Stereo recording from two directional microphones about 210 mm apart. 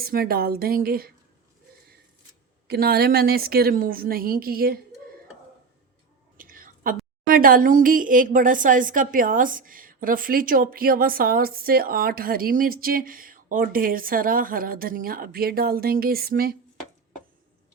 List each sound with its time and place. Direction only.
0.0 s a woman's voice: 45° right (ahead or behind)
2.6 s a woman's voice: 45° right (ahead or behind)
6.3 s a woman's voice: 40° right (ahead or behind)